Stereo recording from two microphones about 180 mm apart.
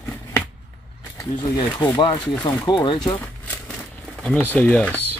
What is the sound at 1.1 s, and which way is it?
Speech, 25° left (ahead or behind).